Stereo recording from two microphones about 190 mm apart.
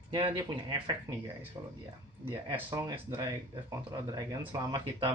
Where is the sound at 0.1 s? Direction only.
25° right (ahead or behind).